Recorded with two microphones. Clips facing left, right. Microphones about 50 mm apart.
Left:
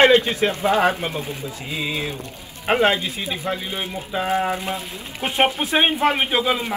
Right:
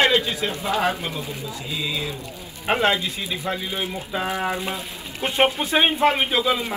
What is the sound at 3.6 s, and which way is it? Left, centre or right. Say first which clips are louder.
Speech: even; left.